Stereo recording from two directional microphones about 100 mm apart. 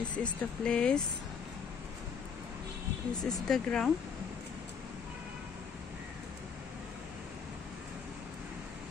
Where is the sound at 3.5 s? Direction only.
5° left (ahead or behind).